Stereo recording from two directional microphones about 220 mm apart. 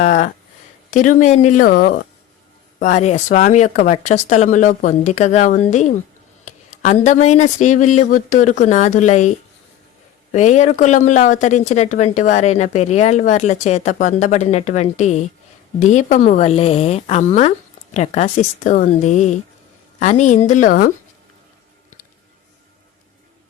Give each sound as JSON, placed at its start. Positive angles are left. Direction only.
{"t": 0.0, "sound": "speech", "side_deg": 35}
{"t": 10.3, "sound": "speech", "side_deg": 30}